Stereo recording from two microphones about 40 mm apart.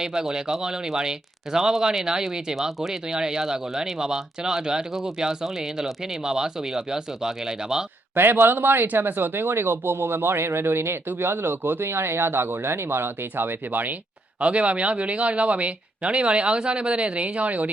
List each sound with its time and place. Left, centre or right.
0.0 s speech: centre
8.1 s speech: right
14.4 s speech: right